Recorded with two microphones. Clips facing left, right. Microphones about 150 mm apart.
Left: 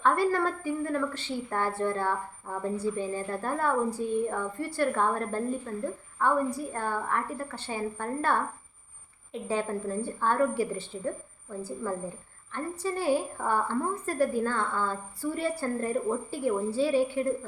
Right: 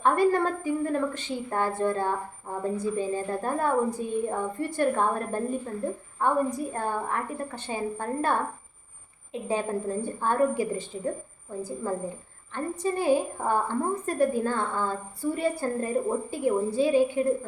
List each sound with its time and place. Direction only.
0.0 s a woman's voice: 15° right (ahead or behind)
12.5 s a woman's voice: 20° right (ahead or behind)